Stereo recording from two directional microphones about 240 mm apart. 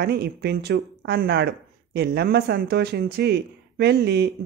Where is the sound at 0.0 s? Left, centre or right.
Right.